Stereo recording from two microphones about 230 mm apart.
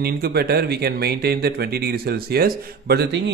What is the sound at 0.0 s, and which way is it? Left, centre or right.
Speech, right.